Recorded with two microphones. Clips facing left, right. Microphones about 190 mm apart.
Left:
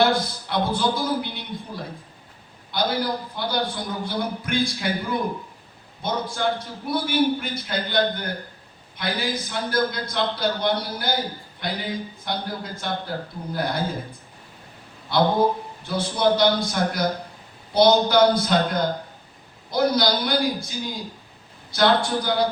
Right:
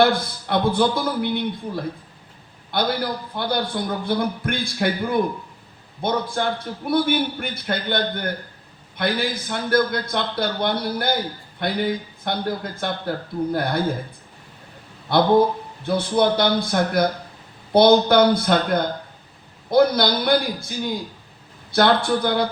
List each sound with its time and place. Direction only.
0.0 s a man's voice: 55° right (ahead or behind)
15.1 s a man's voice: 55° right (ahead or behind)